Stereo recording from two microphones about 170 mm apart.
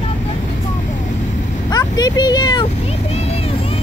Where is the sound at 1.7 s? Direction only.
25° left (ahead or behind).